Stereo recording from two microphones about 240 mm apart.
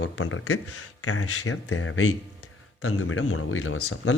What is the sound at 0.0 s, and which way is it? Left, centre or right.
Speech, left.